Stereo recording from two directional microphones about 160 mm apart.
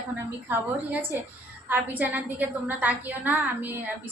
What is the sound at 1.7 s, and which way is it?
A woman's voice, 10° right (ahead or behind).